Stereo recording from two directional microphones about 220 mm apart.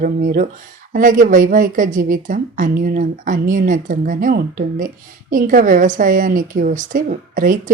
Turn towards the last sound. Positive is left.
turn(degrees=-35)  # may be behind; listen again after turning